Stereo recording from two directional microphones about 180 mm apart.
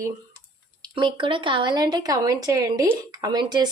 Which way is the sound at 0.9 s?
25° right (ahead or behind).